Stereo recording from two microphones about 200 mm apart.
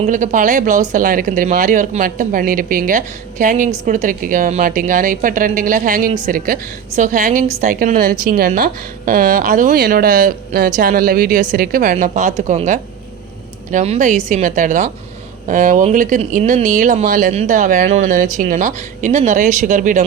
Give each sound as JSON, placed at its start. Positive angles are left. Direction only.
{"t": 0.0, "sound": "a woman's voice", "side_deg": -40}